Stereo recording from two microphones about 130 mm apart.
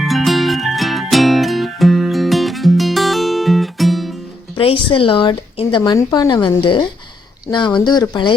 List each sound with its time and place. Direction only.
0.0 s music: centre (ahead or behind)
4.5 s a woman's voice: 40° left (ahead or behind)